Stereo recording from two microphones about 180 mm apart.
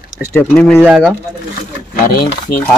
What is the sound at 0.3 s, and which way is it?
Speech, 5° left (ahead or behind).